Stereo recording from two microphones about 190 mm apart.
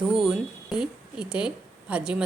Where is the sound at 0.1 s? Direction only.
Centre (ahead or behind).